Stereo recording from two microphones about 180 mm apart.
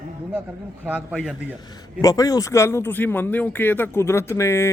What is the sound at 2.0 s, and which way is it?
Speech, 20° left (ahead or behind).